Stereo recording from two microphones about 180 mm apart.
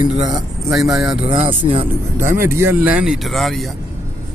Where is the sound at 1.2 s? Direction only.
30° right (ahead or behind).